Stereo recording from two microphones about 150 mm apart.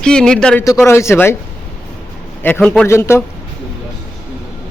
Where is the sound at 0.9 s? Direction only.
15° left (ahead or behind).